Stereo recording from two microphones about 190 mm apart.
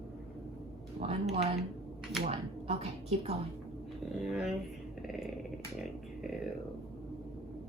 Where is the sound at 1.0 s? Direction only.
30° right (ahead or behind).